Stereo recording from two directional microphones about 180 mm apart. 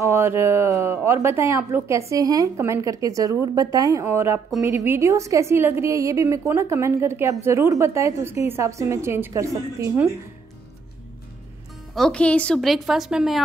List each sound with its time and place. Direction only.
0.0 s a woman's voice: 15° right (ahead or behind)
11.9 s a woman's voice: 5° left (ahead or behind)